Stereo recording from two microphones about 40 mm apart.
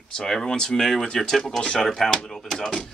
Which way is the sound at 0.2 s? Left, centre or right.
Centre.